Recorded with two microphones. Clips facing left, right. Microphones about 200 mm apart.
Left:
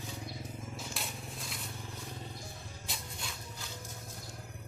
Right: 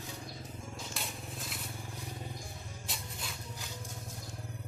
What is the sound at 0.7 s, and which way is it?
Crushing, centre (ahead or behind).